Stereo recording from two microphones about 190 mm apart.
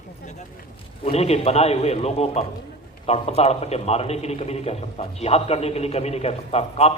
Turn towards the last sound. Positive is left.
turn(degrees=35)  # may be behind; listen again after turning